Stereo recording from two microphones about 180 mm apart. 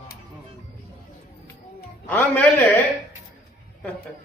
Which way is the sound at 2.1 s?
10° left (ahead or behind).